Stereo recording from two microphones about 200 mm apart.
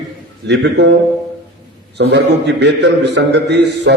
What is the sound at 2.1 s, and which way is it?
A man's voice, 60° right (ahead or behind).